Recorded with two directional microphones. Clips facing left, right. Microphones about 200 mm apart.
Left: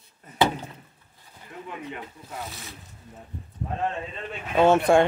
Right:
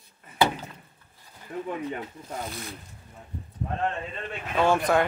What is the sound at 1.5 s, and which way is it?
Speech, 35° right (ahead or behind).